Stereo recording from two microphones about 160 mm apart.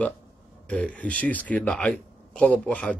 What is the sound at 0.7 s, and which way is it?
A man's voice, 5° left (ahead or behind).